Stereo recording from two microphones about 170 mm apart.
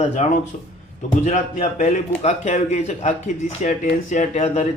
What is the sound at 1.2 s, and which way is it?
A man's voice, 45° left (ahead or behind).